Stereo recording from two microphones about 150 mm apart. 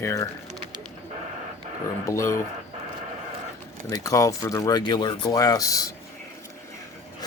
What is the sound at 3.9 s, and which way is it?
Speech, 20° left (ahead or behind).